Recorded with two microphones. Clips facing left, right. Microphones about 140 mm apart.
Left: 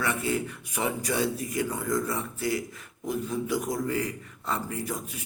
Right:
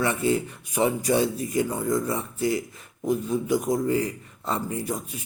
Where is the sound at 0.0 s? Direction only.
25° right (ahead or behind).